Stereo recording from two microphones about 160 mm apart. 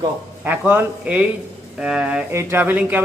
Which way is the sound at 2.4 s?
15° right (ahead or behind).